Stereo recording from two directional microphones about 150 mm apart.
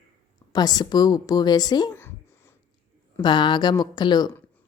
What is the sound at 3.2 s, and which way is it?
A woman's voice, 30° left (ahead or behind).